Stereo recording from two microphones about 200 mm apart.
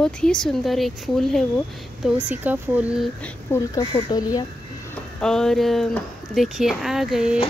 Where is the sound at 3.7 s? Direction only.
20° left (ahead or behind).